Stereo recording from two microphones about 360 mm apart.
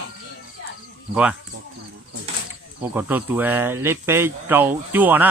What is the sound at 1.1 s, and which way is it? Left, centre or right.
Speech, centre.